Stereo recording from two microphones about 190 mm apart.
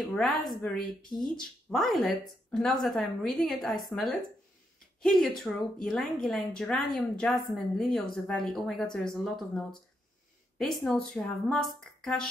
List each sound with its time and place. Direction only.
0.0 s speech: centre (ahead or behind)